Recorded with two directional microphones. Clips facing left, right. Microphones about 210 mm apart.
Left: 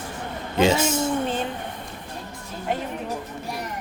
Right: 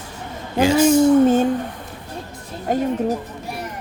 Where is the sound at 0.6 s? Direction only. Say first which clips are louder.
Right 5 dB; 25° left (ahead or behind).